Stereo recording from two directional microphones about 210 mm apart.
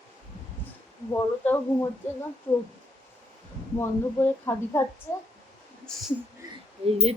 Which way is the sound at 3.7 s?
10° left (ahead or behind).